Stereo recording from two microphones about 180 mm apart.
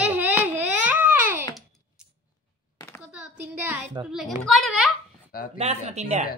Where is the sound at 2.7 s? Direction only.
15° left (ahead or behind).